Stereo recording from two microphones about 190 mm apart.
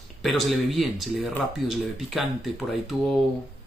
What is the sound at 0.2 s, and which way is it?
A man's voice, centre (ahead or behind).